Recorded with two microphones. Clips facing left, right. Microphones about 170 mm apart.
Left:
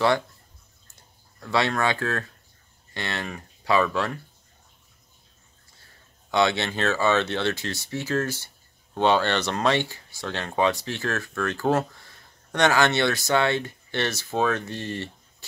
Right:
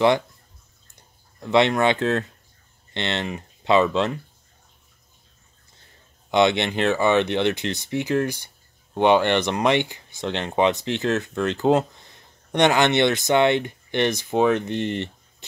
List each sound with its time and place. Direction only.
1.4 s speech: 20° right (ahead or behind)
6.3 s speech: 20° right (ahead or behind)